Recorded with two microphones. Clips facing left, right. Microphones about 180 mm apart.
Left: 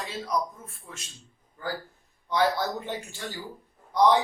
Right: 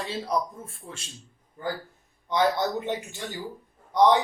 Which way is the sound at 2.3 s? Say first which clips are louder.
Right 1 dB; 20° right (ahead or behind).